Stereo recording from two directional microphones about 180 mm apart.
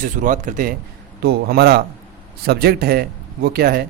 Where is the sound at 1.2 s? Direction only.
60° right (ahead or behind).